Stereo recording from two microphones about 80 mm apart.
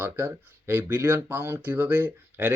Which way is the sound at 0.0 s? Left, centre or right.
Right.